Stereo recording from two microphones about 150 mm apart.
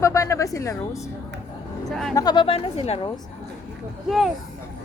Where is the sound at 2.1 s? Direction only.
25° left (ahead or behind); by 2.9 s 40° left (ahead or behind).